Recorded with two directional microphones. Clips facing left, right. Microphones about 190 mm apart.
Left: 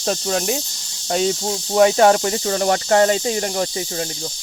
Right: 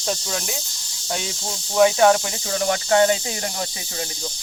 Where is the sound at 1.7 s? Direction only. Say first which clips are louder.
Left 2 dB; 45° left (ahead or behind).